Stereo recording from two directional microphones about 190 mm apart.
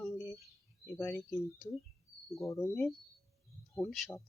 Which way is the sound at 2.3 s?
15° left (ahead or behind).